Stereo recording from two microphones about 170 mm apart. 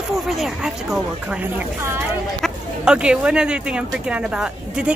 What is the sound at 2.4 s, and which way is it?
Speech, 5° right (ahead or behind).